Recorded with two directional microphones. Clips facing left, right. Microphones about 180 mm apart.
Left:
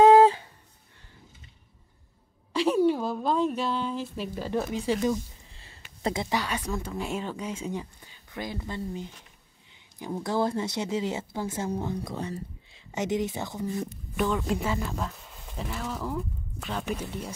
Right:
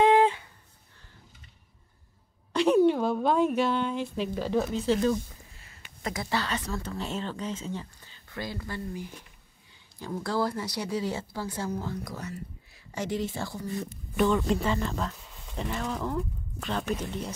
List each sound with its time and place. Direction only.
0.0 s a sound: 40° left (ahead or behind)
2.5 s a woman's voice: 5° left (ahead or behind)
4.4 s speech: 10° left (ahead or behind)
5.5 s a sound: 30° left (ahead or behind)
6.2 s a woman's voice: 15° left (ahead or behind)
14.1 s speech: 5° left (ahead or behind)